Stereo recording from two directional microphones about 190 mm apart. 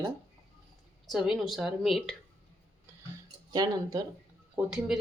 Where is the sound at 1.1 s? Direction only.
Centre (ahead or behind).